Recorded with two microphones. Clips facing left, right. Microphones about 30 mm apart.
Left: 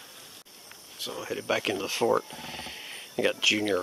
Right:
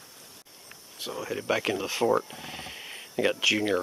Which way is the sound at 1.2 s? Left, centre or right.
Centre.